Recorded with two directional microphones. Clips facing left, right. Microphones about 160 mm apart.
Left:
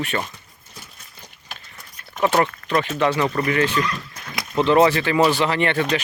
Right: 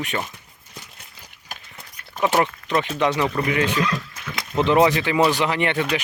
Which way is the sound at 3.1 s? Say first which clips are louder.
Left 1 dB; centre (ahead or behind).